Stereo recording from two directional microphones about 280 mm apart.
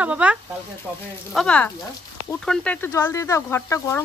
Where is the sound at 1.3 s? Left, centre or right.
Centre.